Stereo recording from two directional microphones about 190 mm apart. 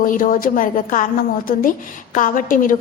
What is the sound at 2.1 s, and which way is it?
Speech, 45° left (ahead or behind).